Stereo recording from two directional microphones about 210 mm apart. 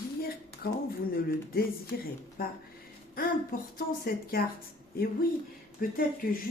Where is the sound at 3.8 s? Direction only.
45° left (ahead or behind).